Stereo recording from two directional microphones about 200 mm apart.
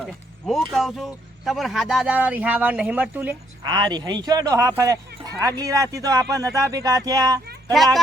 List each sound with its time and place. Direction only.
0.0 s speech: centre (ahead or behind)
3.7 s speech: 20° right (ahead or behind)